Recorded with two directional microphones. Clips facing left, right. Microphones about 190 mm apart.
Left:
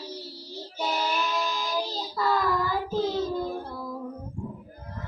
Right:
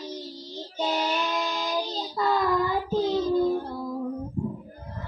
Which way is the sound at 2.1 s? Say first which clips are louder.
Right 1 dB; 20° right (ahead or behind).